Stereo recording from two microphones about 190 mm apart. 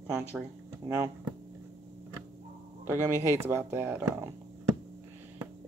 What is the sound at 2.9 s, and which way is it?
Speech, 15° right (ahead or behind).